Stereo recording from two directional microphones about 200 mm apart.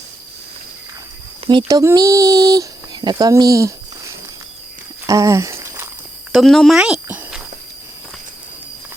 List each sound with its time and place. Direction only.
1.5 s speech: 20° right (ahead or behind)
5.0 s a sound: 15° right (ahead or behind)
6.3 s speech: centre (ahead or behind)